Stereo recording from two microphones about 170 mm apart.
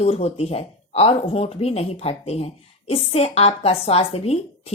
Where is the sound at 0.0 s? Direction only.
40° left (ahead or behind).